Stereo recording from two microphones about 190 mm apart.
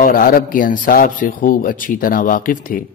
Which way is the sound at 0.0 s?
45° left (ahead or behind).